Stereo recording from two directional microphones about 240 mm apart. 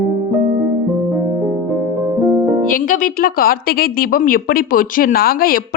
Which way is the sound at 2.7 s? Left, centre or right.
Left.